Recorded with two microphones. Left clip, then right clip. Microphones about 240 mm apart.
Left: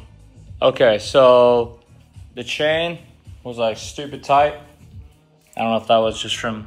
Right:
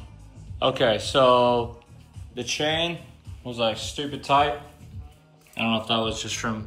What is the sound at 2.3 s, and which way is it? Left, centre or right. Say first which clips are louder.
Speech: left 6 dB; left.